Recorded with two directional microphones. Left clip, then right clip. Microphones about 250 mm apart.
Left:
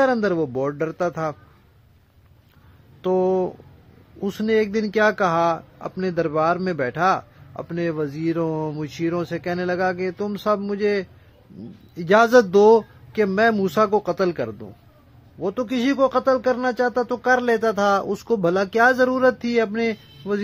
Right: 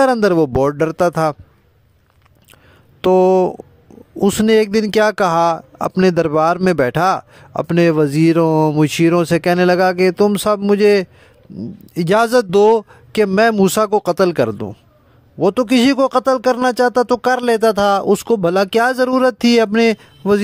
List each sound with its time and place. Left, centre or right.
0.0 s speech: right
3.0 s speech: right